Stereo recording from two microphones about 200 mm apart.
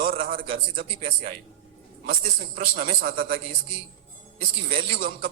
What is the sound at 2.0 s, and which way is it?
A man's voice, 45° right (ahead or behind).